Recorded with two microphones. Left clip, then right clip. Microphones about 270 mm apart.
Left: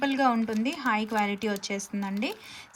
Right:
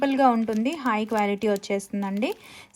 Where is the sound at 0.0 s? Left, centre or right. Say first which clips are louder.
Right 5 dB; centre.